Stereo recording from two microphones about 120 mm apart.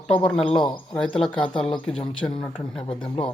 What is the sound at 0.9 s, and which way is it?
Speech, 5° left (ahead or behind).